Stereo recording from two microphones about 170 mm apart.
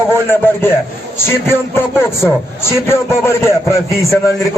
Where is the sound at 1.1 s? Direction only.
15° left (ahead or behind).